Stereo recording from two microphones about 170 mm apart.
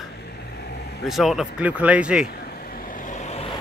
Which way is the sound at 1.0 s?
Centre (ahead or behind).